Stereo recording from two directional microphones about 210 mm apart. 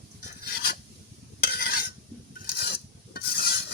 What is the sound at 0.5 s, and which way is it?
Filing, 50° left (ahead or behind).